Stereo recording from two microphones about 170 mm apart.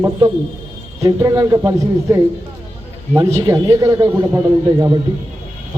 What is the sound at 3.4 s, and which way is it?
Speech, 20° right (ahead or behind).